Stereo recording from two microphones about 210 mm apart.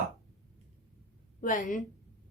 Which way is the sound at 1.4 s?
40° left (ahead or behind).